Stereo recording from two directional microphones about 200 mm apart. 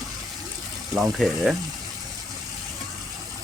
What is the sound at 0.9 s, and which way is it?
Speech, centre (ahead or behind).